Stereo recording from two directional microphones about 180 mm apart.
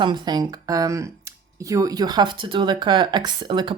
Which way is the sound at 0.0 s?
25° right (ahead or behind).